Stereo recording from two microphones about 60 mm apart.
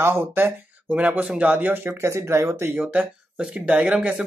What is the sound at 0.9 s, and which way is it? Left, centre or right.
Speech, right.